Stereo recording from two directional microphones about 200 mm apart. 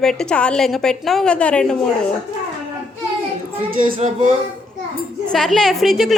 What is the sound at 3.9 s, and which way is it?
Speech, 35° right (ahead or behind).